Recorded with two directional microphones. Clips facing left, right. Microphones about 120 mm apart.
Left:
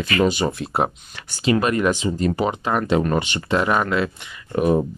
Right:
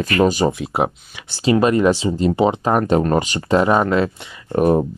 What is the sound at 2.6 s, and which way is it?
Speech, 45° right (ahead or behind).